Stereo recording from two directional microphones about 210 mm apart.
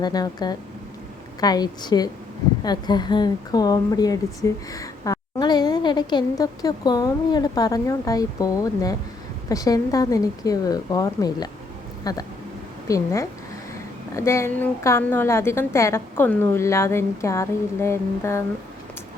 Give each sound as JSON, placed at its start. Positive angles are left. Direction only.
{"t": 0.0, "sound": "a woman's voice", "side_deg": 20}
{"t": 14.2, "sound": "a woman's voice", "side_deg": 15}